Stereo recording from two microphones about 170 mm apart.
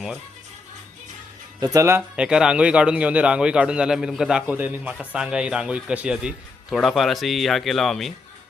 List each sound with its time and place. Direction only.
1.5 s speech: 20° right (ahead or behind)
2.0 s a man's voice: 5° right (ahead or behind)